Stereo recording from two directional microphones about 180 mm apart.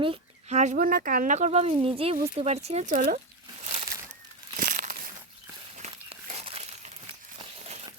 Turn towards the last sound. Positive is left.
turn(degrees=-35)  # may be behind; listen again after turning